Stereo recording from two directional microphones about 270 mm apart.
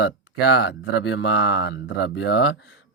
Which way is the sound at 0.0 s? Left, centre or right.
Left.